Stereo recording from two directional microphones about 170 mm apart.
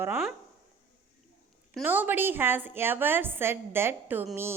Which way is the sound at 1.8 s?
10° right (ahead or behind).